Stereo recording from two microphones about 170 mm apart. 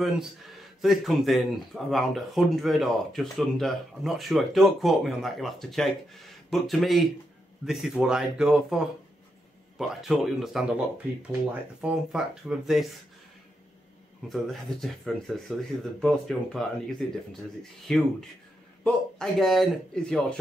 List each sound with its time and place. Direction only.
0.0 s speech: centre (ahead or behind)
11.8 s speech: 5° right (ahead or behind)
14.3 s speech: centre (ahead or behind)
17.9 s speech: 5° left (ahead or behind)